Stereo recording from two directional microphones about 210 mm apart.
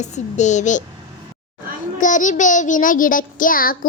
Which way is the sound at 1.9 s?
35° left (ahead or behind).